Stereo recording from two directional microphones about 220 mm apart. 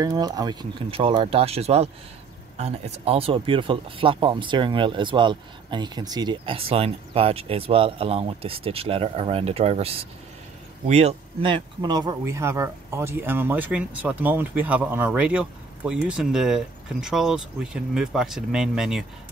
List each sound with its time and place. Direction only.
0.0 s speech: 20° right (ahead or behind); by 19.0 s centre (ahead or behind)